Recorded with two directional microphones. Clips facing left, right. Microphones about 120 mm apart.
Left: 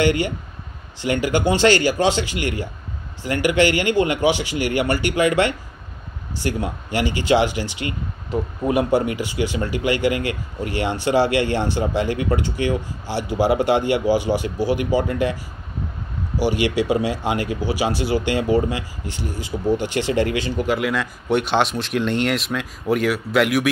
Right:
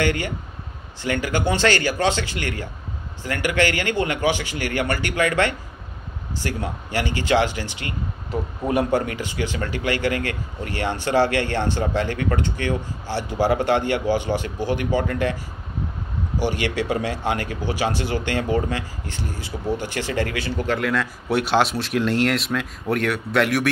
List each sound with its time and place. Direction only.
0.0 s speech: 15° left (ahead or behind)
8.6 s speech: 15° left (ahead or behind)